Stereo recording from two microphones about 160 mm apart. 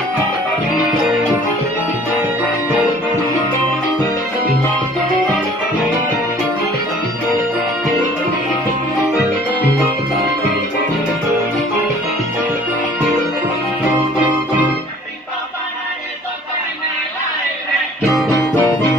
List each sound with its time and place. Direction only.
18.3 s music: 20° left (ahead or behind)